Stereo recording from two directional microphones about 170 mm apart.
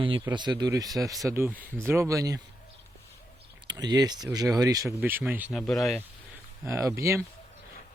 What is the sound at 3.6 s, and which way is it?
Speech, 25° right (ahead or behind).